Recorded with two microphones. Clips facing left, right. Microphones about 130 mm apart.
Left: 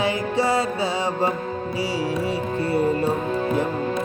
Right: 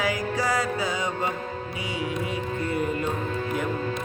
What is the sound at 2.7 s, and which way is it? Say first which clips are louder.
Music: left 7 dB; 35° left (ahead or behind).